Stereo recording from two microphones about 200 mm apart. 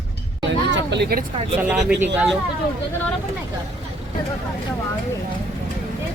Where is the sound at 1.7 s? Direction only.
Centre (ahead or behind).